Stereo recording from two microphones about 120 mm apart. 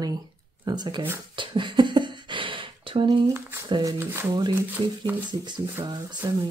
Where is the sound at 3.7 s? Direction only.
40° right (ahead or behind).